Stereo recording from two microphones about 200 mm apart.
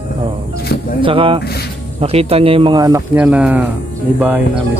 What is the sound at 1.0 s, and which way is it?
A man's voice, 25° right (ahead or behind).